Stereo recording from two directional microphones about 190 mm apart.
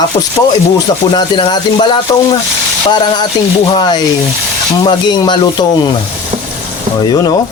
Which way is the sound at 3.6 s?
25° left (ahead or behind).